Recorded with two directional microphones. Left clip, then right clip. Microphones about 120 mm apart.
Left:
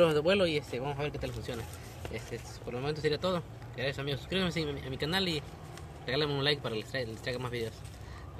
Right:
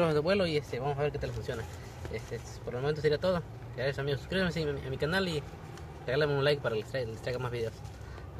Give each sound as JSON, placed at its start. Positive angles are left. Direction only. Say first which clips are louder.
{"t": 0.0, "sound": "speech", "louder": "left 2 dB", "side_deg": -45}
{"t": 2.7, "sound": "speech", "louder": "right 3 dB", "side_deg": -30}